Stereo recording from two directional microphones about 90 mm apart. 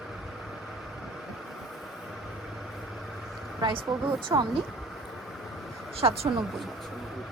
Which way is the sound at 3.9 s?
55° right (ahead or behind).